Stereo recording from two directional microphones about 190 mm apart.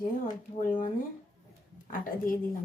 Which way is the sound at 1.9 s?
45° left (ahead or behind).